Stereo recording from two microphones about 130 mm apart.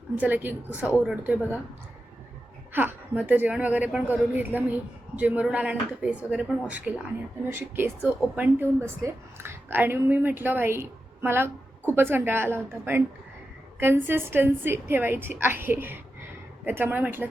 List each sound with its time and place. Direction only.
0.2 s a woman's voice: 15° right (ahead or behind)
2.7 s a woman's voice: 15° right (ahead or behind)